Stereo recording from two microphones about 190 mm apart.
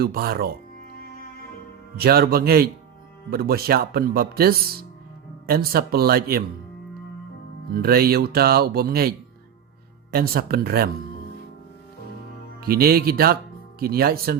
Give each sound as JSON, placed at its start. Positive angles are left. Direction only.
{"t": 0.0, "sound": "speech", "side_deg": -55}
{"t": 2.0, "sound": "speech", "side_deg": -55}
{"t": 7.7, "sound": "speech", "side_deg": -55}
{"t": 12.5, "sound": "speech", "side_deg": -55}